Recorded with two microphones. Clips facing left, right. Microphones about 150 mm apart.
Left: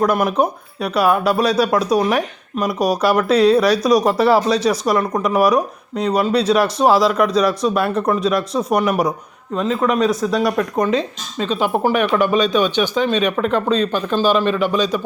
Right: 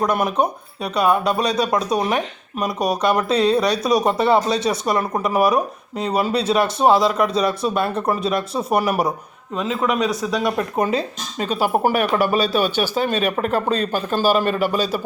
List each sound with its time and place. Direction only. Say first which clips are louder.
0.0 s speech: left 3 dB; centre (ahead or behind)
11.9 s speech: left 4 dB; 40° right (ahead or behind)
12.3 s speech: left 3 dB; 5° right (ahead or behind)
13.0 s speech: left 2 dB; 45° right (ahead or behind)
14.7 s speech: left 3 dB; 10° right (ahead or behind)